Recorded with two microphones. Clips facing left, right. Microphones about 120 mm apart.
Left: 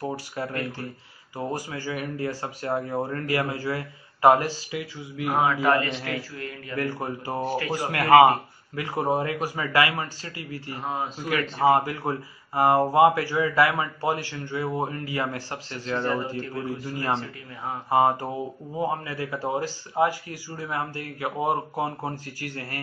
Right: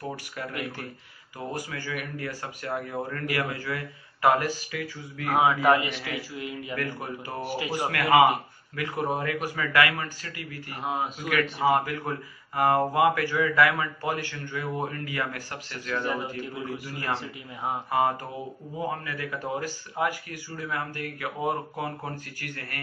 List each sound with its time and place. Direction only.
1.4 s speech: 30° left (ahead or behind)
4.7 s a sound: 20° left (ahead or behind)
5.4 s a man's voice: 15° right (ahead or behind)
6.8 s speech: 30° left (ahead or behind)
7.5 s a man's voice: 15° right (ahead or behind)
7.9 s speech: 25° left (ahead or behind)
10.7 s a man's voice: 10° right (ahead or behind)
11.5 s speech: 30° left (ahead or behind)
16.1 s a man's voice: 10° right (ahead or behind)
16.8 s speech: 25° left (ahead or behind)
17.8 s a sound: 30° left (ahead or behind)
18.8 s speech: 30° left (ahead or behind)